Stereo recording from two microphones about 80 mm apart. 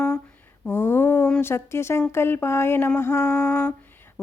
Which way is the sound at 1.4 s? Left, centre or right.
Left.